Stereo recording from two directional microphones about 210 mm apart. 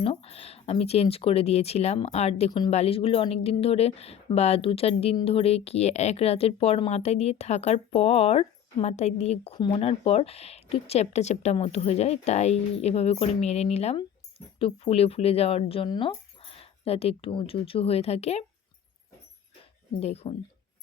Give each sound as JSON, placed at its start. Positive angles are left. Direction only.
{"t": 0.0, "sound": "speech", "side_deg": 30}
{"t": 20.0, "sound": "speech", "side_deg": 30}